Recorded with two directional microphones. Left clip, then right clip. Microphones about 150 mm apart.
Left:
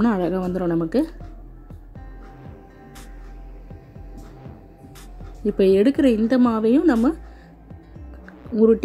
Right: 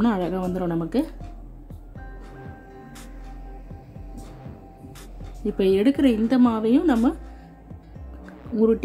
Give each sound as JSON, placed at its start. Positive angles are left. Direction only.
{"t": 0.0, "sound": "a woman's voice", "side_deg": 30}
{"t": 5.4, "sound": "a woman's voice", "side_deg": 30}
{"t": 8.5, "sound": "a woman's voice", "side_deg": 25}